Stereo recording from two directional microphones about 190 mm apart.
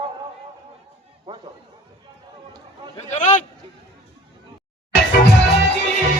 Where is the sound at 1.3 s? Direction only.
25° right (ahead or behind).